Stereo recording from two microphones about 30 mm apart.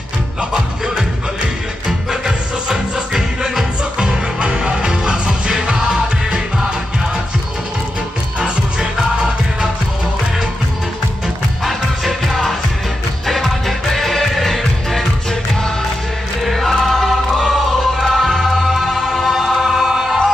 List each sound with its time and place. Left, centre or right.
1.9 s music: centre
8.4 s music: right
11.6 s music: centre
16.5 s choir: centre
17.3 s music: centre